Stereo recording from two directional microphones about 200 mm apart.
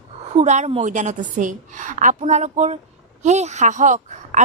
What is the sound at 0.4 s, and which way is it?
A woman's voice, 35° right (ahead or behind).